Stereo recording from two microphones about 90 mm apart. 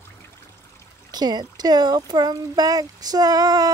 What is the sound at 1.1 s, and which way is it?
Speech, 50° right (ahead or behind).